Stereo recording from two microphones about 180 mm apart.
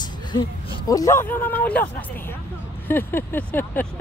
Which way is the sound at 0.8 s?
20° left (ahead or behind).